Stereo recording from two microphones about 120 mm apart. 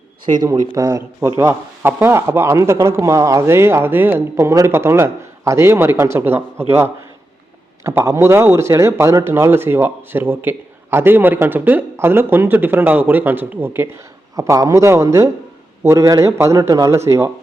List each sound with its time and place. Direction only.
0.4 s speech: 30° right (ahead or behind)